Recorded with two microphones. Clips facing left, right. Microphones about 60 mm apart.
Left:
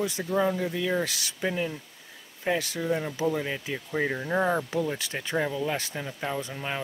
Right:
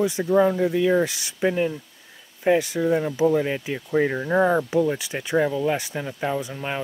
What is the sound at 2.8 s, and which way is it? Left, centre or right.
Speech, centre.